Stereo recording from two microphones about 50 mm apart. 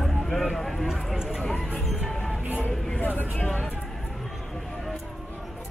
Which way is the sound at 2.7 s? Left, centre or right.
Centre.